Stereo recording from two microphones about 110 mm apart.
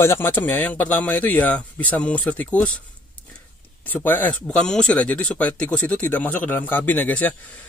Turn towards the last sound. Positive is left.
turn(degrees=15)  # may be behind; listen again after turning